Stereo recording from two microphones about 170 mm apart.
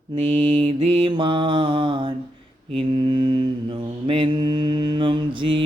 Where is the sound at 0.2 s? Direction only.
30° right (ahead or behind).